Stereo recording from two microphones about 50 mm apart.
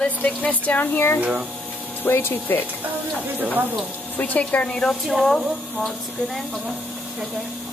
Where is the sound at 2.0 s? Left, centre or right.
Left.